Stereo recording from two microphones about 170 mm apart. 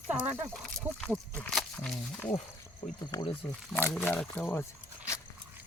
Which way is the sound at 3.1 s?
25° left (ahead or behind).